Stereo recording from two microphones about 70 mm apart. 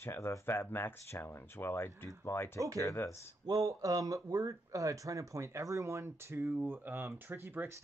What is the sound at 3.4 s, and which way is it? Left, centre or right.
Speech, right.